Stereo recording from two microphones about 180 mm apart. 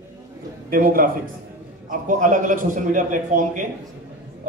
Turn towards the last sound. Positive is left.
turn(degrees=-45)  # may be behind; listen again after turning